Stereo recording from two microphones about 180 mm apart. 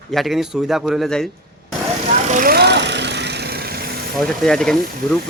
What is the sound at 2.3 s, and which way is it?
Vehicle, 50° right (ahead or behind).